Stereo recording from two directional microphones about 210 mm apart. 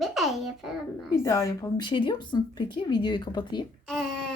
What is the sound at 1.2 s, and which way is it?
A woman's voice, 15° left (ahead or behind).